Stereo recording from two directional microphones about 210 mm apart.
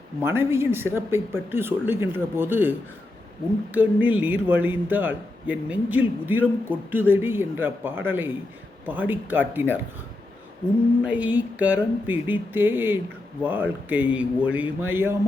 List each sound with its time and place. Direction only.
0.2 s a man's voice: 10° right (ahead or behind)
11.0 s a man's voice: 5° right (ahead or behind)